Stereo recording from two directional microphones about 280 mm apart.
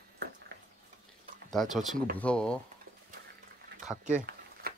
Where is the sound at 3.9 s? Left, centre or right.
Right.